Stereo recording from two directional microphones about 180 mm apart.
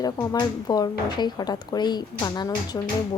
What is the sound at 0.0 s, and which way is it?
Speech, 20° left (ahead or behind).